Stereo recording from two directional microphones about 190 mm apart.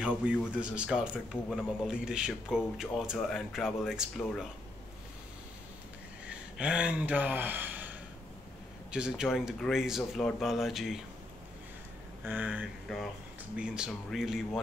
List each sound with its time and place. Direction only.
0.0 s a man's voice: 5° right (ahead or behind)
6.2 s speech: 5° right (ahead or behind)
8.9 s a man's voice: 5° right (ahead or behind)
12.3 s a man's voice: 10° right (ahead or behind)